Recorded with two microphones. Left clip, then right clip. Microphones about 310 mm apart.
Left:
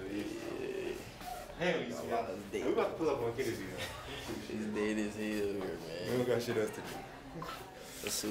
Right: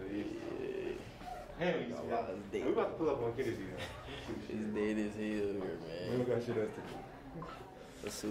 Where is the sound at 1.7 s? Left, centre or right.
Centre.